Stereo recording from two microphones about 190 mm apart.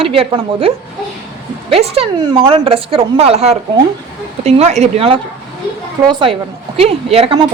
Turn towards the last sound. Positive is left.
turn(degrees=-30)  # may be behind; listen again after turning